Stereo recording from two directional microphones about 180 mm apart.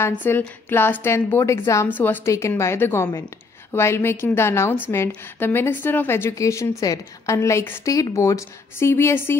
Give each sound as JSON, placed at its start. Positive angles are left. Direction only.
{"t": 0.0, "sound": "a woman's voice", "side_deg": 10}